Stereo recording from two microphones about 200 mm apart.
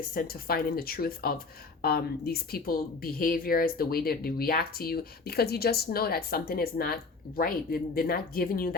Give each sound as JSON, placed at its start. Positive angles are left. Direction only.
{"t": 0.1, "sound": "speech", "side_deg": 50}